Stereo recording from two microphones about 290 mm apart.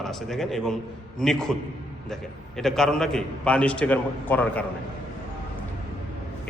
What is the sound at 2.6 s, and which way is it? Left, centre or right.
A man's voice, centre.